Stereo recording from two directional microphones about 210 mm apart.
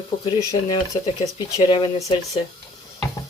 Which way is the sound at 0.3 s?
20° left (ahead or behind).